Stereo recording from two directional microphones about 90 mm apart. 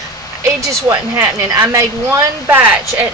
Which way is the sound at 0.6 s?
35° right (ahead or behind).